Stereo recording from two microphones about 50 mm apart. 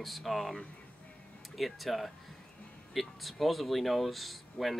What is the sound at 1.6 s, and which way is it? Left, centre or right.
Speech, centre.